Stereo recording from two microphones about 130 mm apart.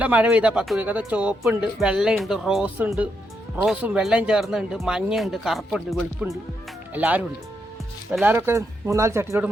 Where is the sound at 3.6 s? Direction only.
10° right (ahead or behind).